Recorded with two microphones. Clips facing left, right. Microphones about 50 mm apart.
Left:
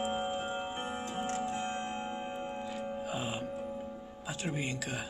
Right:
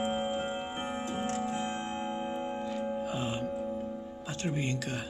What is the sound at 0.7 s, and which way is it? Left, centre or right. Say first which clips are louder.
Tick-tock: right 2 dB; right.